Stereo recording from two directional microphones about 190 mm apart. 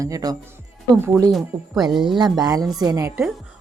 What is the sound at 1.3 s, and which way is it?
Speech, centre (ahead or behind).